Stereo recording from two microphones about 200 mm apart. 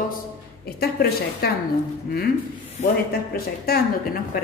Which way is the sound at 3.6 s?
50° left (ahead or behind).